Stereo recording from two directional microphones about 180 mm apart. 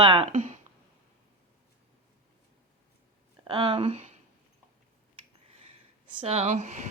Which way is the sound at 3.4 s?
30° right (ahead or behind).